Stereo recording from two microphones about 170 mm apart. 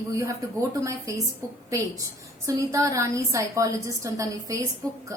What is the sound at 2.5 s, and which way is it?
A woman's voice, 20° right (ahead or behind).